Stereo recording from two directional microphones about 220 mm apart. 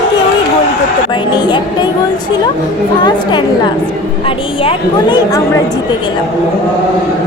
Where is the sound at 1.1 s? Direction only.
20° left (ahead or behind).